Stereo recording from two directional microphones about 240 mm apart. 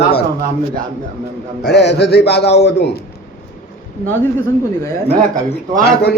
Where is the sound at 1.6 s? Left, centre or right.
Left.